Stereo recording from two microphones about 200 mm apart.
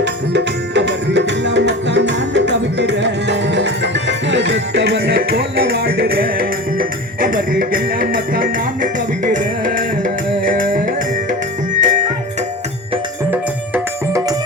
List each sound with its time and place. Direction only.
0.0 s music: 60° right (ahead or behind); by 12.0 s 40° right (ahead or behind)
13.3 s music: 10° right (ahead or behind)